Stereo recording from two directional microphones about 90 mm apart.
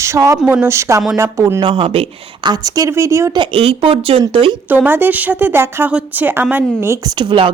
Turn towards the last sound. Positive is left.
turn(degrees=-65)  # may be behind; listen again after turning